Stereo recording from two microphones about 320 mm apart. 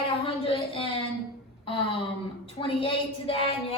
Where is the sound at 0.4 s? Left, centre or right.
Centre.